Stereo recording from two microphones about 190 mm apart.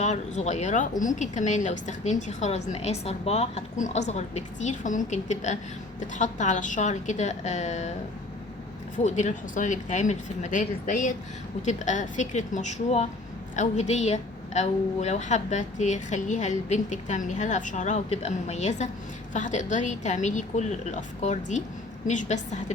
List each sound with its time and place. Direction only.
0.0 s a woman's voice: 40° left (ahead or behind)
9.0 s a woman's voice: 40° left (ahead or behind)